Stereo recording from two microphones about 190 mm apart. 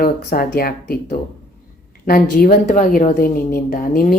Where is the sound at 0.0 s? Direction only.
45° left (ahead or behind).